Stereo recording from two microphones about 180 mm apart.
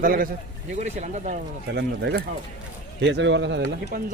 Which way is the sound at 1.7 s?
65° right (ahead or behind).